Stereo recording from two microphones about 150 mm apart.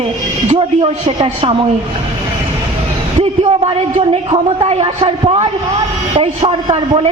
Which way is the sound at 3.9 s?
40° right (ahead or behind).